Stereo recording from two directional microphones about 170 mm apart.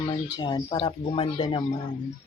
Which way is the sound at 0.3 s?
25° left (ahead or behind).